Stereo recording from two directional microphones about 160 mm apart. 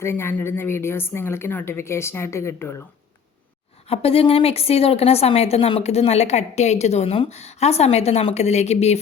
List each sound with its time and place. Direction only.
0.0 s a woman's voice: 15° left (ahead or behind)
3.8 s a woman's voice: 35° left (ahead or behind)